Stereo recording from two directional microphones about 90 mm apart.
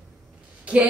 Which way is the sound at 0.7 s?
15° right (ahead or behind).